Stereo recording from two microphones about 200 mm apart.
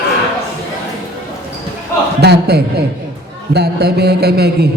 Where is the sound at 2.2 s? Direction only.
55° right (ahead or behind).